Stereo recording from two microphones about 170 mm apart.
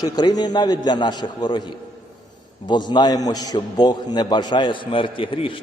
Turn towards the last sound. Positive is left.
turn(degrees=30)  # may be behind; listen again after turning